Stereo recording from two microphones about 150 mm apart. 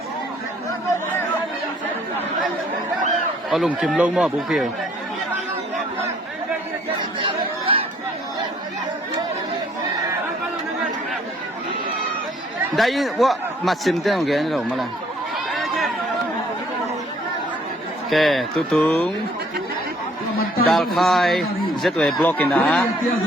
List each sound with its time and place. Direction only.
3.5 s speech: centre (ahead or behind)
7.2 s chatter: 35° right (ahead or behind)
12.7 s speech: centre (ahead or behind)
15.4 s run: centre (ahead or behind)
18.1 s speech: centre (ahead or behind)
20.7 s speech: centre (ahead or behind)